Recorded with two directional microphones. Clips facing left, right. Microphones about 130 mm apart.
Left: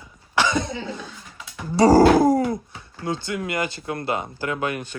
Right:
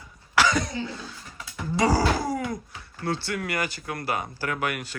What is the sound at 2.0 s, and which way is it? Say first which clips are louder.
Groan: left 11 dB; 50° left (ahead or behind).